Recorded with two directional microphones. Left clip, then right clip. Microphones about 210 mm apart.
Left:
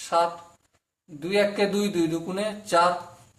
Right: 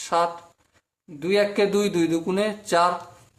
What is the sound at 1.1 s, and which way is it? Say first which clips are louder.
A man's voice: right 2 dB; 40° right (ahead or behind).